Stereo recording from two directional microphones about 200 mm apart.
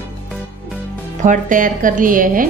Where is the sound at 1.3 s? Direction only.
40° right (ahead or behind).